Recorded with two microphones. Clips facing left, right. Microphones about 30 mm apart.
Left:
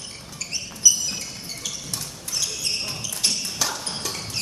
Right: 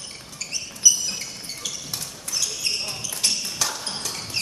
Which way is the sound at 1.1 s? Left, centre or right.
Centre.